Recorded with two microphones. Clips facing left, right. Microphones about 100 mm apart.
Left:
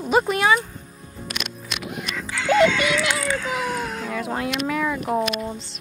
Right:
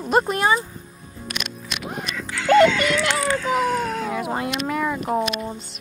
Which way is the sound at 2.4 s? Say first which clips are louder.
Right 3 dB; 50° right (ahead or behind).